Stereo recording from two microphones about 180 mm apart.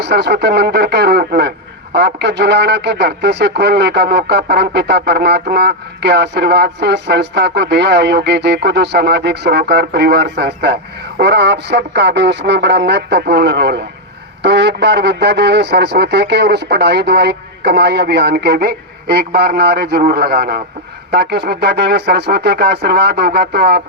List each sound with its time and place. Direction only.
0.0 s speech: 70° right (ahead or behind)